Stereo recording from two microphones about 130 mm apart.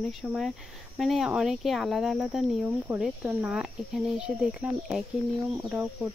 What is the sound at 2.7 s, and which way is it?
Speech, 15° right (ahead or behind).